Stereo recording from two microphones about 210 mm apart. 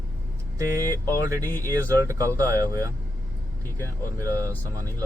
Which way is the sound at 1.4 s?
10° left (ahead or behind).